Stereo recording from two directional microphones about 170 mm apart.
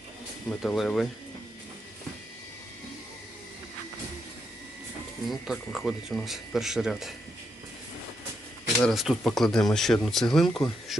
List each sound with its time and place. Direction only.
0.6 s speech: centre (ahead or behind)
5.3 s speech: centre (ahead or behind)
8.8 s speech: centre (ahead or behind)